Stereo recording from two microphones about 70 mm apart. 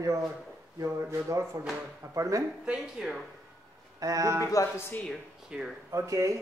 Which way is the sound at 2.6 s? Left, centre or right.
Centre.